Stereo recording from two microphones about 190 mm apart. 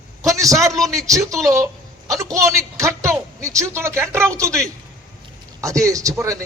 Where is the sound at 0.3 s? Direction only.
15° right (ahead or behind).